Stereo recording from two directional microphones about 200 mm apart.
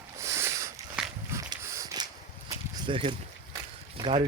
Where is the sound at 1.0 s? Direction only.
5° right (ahead or behind).